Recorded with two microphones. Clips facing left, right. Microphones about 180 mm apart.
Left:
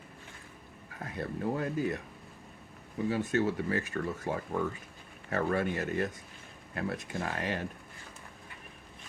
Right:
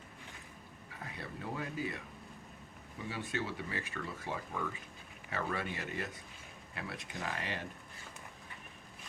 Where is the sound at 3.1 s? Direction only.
45° left (ahead or behind).